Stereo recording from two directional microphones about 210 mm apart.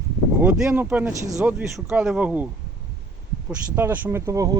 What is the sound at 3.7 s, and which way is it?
Speech, 10° right (ahead or behind).